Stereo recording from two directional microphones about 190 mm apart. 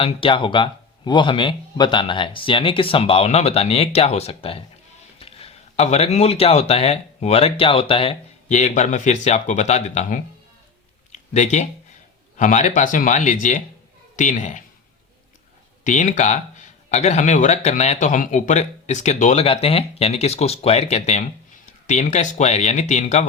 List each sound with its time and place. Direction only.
0.0 s speech: 25° left (ahead or behind)
11.1 s a sound: 40° left (ahead or behind)
12.4 s speech: 40° left (ahead or behind)
15.8 s speech: 40° left (ahead or behind)